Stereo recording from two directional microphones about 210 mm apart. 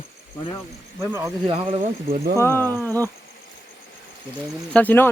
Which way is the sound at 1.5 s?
25° right (ahead or behind).